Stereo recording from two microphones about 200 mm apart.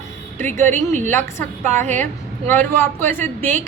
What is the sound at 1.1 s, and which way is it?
Speech, 10° left (ahead or behind).